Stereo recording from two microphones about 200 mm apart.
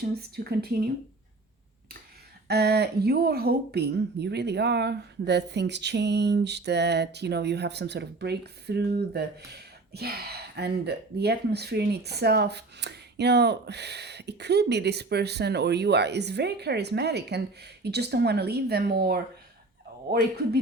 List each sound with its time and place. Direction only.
0.0 s speech: 50° right (ahead or behind)
2.5 s speech: 55° right (ahead or behind)